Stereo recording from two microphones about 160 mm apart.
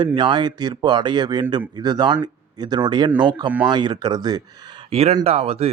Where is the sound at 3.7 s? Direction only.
25° right (ahead or behind).